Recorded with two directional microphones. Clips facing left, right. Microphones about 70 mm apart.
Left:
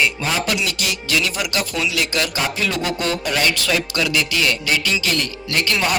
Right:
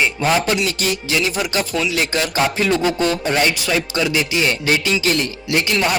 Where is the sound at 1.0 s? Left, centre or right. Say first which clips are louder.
Left 1 dB; right.